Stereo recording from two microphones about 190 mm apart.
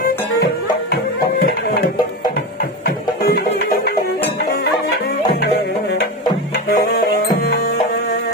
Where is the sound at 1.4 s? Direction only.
50° left (ahead or behind).